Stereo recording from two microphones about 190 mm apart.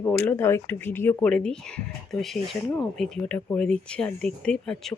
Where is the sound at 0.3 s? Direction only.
10° left (ahead or behind).